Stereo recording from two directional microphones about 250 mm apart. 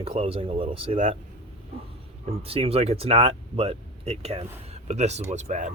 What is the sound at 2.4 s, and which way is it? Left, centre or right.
Speech, right.